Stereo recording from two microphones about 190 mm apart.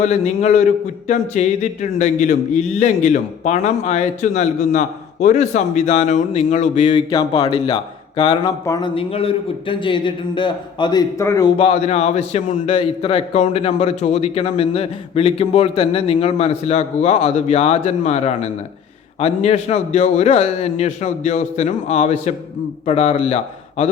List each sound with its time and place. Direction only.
0.0 s a man's voice: 35° left (ahead or behind)
7.1 s speech: 20° left (ahead or behind)
9.0 s a man's voice: 30° left (ahead or behind)